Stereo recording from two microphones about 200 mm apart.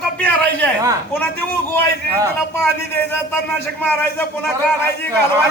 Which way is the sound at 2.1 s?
15° right (ahead or behind).